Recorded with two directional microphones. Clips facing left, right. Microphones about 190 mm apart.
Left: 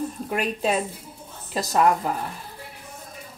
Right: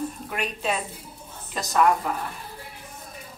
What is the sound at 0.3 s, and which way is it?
A woman's voice, 40° left (ahead or behind).